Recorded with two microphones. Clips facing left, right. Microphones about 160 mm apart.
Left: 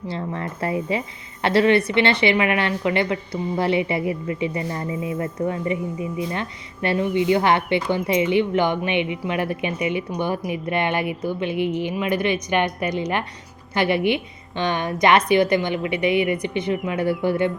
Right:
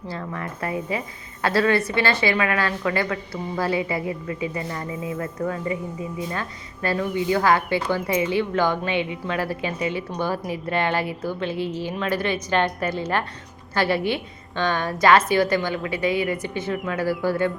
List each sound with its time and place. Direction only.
0.1 s a woman's voice: 25° left (ahead or behind)